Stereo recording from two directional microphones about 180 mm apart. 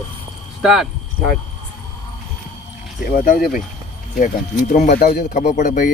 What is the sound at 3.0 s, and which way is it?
Speech, 55° left (ahead or behind).